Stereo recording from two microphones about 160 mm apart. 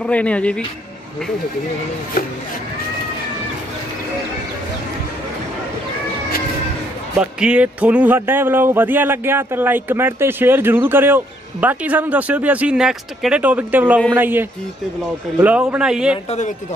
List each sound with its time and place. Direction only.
0.0 s speech: 10° left (ahead or behind)
7.2 s a man's voice: 5° right (ahead or behind)
16.3 s speech: 50° left (ahead or behind)